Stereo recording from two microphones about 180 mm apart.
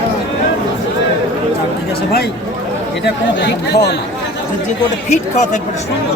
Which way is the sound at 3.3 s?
70° left (ahead or behind).